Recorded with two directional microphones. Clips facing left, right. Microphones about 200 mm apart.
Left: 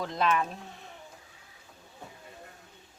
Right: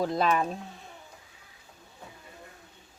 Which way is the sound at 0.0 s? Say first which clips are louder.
Right 3 dB; 35° right (ahead or behind).